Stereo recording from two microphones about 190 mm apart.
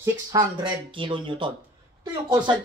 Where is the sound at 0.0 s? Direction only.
20° right (ahead or behind).